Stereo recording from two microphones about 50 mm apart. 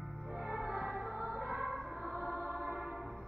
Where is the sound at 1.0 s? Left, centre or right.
Centre.